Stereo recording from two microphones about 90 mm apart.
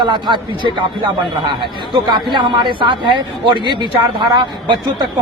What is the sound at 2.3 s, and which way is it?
Speech, 60° right (ahead or behind).